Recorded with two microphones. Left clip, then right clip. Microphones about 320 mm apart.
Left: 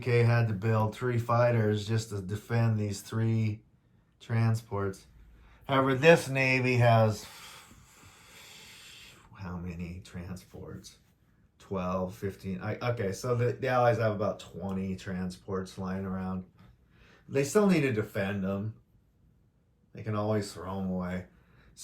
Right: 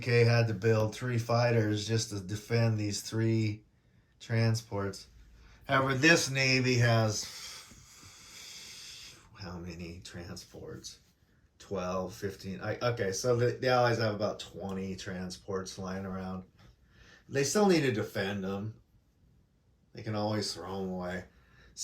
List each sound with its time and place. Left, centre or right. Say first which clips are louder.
0.0 s speech: right 1 dB; centre
20.0 s speech: left 2 dB; centre